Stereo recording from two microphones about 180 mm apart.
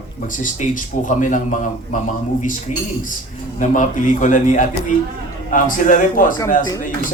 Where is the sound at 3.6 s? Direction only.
45° left (ahead or behind).